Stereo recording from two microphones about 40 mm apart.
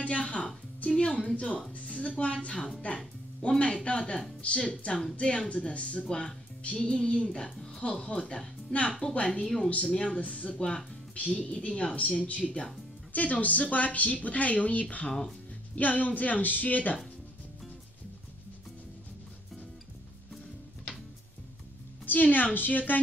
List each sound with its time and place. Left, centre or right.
0.0 s music: left
1.1 s a sound: left
1.7 s speech: left
9.3 s speech: centre
9.7 s speech: left
10.5 s speech: left
13.1 s speech: left
22.0 s a woman's voice: left